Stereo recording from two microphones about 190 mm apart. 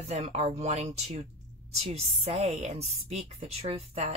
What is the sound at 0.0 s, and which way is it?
A woman's voice, 35° right (ahead or behind).